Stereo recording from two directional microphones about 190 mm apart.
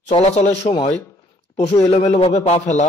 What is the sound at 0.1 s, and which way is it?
Speech, 35° left (ahead or behind).